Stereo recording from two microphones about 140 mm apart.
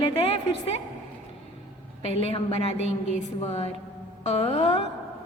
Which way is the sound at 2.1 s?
45° left (ahead or behind).